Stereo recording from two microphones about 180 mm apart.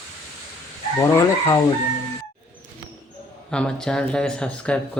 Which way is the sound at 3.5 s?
5° left (ahead or behind).